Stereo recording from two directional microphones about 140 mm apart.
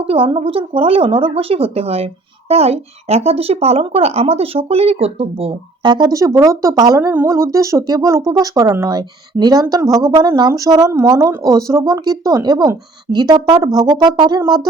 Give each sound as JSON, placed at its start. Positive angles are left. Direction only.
{"t": 0.0, "sound": "speech", "side_deg": -40}